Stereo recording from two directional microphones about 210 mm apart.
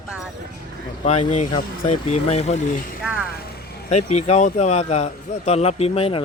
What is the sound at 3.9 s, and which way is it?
A man's voice, 30° left (ahead or behind).